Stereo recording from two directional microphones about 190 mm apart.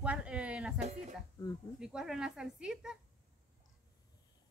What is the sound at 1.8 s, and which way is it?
Speech, 5° right (ahead or behind).